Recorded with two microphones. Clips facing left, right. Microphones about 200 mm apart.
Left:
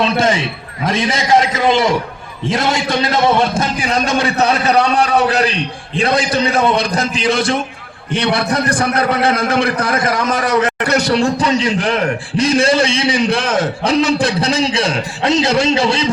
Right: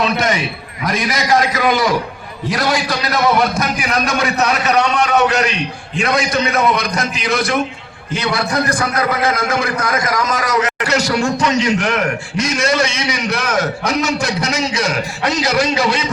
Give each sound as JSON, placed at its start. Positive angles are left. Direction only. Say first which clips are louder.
{"t": 0.0, "sound": "a man's voice", "louder": "left 2 dB", "side_deg": 30}